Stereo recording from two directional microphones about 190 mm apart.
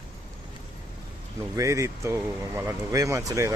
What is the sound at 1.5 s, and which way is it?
Speech, 15° right (ahead or behind).